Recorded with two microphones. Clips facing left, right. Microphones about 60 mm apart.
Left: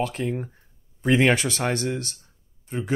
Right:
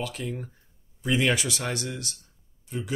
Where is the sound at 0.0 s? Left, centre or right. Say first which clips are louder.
Left 6 dB; left.